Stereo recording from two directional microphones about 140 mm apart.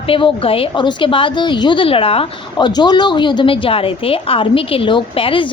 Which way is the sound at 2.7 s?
30° left (ahead or behind).